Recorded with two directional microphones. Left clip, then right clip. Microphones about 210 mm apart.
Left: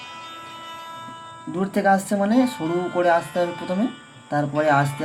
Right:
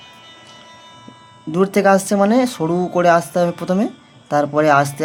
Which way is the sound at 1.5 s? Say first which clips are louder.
Right 6 dB; 35° right (ahead or behind).